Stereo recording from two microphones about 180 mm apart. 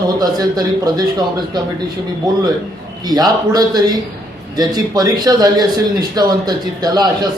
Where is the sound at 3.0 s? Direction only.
20° right (ahead or behind).